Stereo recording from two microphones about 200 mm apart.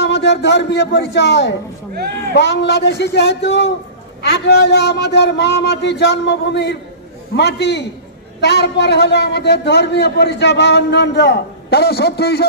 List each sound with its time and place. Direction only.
0.0 s a man's voice: 60° left (ahead or behind)